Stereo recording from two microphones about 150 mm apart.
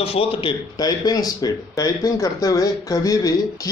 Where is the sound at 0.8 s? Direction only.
25° left (ahead or behind).